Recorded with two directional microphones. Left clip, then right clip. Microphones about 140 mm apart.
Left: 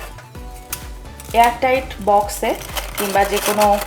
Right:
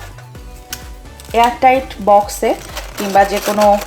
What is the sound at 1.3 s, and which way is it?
Speech, 40° right (ahead or behind).